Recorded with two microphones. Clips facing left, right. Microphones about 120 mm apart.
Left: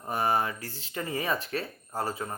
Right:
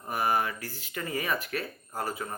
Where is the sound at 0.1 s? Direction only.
30° left (ahead or behind).